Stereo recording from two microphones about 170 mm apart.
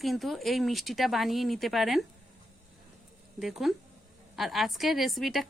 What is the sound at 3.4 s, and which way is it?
A woman's voice, centre (ahead or behind).